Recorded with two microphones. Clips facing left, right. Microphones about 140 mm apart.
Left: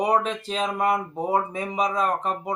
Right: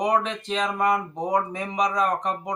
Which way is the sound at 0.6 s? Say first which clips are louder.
Even; 30° left (ahead or behind).